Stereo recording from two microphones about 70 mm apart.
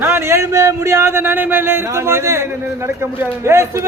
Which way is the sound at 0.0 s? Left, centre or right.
Right.